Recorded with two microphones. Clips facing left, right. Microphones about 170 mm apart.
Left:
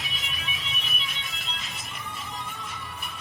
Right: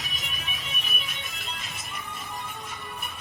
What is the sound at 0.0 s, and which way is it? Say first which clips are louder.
Music: left 1 dB; 45° right (ahead or behind).